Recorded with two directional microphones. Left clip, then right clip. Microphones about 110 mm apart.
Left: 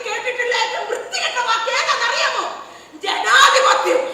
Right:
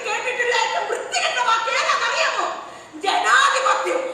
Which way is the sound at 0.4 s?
50° right (ahead or behind).